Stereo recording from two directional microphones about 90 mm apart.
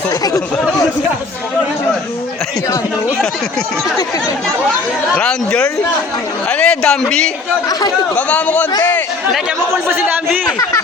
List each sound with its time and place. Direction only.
0.1 s speech: 40° left (ahead or behind)
5.1 s speech: 10° left (ahead or behind)
7.7 s speech: 50° left (ahead or behind)
8.1 s speech: 15° left (ahead or behind)
9.9 s a man's voice: 20° right (ahead or behind)